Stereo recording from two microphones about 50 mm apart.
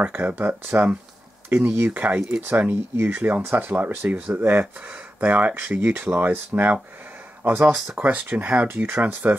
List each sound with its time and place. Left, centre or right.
0.0 s speech: right
1.5 s speech: right
2.0 s speech: right
2.7 s speech: right
3.2 s speech: right
4.8 s speech: right
5.9 s speech: right
7.7 s speech: centre
8.0 s speech: right